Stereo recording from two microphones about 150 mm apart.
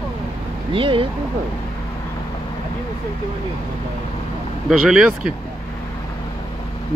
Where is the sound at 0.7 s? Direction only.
35° right (ahead or behind).